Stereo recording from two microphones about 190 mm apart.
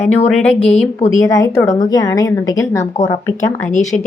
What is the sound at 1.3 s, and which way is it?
A woman's voice, 15° left (ahead or behind).